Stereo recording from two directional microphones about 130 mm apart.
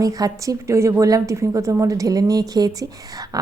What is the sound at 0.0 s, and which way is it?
A woman's voice, 25° right (ahead or behind).